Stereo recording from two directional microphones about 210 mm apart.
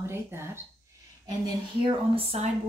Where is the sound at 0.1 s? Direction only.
10° right (ahead or behind).